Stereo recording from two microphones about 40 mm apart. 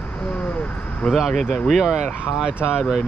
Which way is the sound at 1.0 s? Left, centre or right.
Left.